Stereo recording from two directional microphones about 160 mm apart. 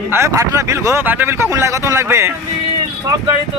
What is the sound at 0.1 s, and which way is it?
Speech, 15° right (ahead or behind).